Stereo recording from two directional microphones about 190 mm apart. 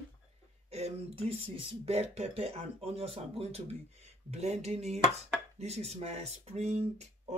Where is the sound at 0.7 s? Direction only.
35° right (ahead or behind).